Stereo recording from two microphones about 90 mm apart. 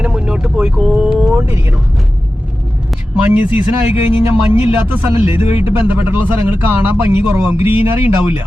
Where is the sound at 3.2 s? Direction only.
15° right (ahead or behind).